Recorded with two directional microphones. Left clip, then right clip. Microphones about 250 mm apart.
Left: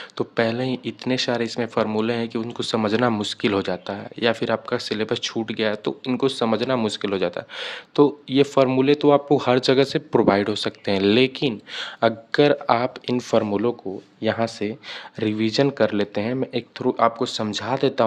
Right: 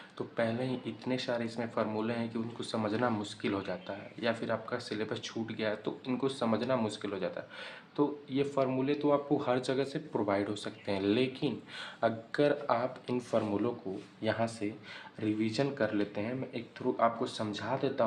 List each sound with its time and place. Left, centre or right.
0.2 s speech: left